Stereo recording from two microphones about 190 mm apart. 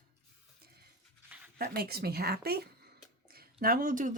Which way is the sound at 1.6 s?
55° right (ahead or behind).